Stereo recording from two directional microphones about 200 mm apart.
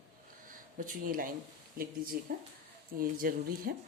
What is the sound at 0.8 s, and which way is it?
Speech, 45° right (ahead or behind).